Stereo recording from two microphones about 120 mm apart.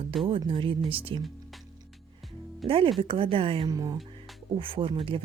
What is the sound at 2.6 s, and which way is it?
Speech, 50° right (ahead or behind).